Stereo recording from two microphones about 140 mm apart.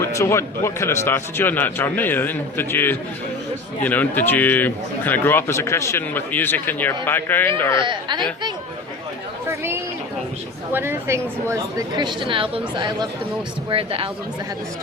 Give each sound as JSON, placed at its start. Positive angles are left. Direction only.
{"t": 0.0, "sound": "speech", "side_deg": 20}
{"t": 7.8, "sound": "speech", "side_deg": -35}
{"t": 9.5, "sound": "a woman's voice", "side_deg": -15}
{"t": 11.9, "sound": "speech", "side_deg": -35}